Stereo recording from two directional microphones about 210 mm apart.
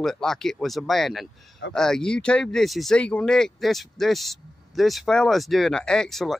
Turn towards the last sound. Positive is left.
turn(degrees=0)  # may be behind; listen again after turning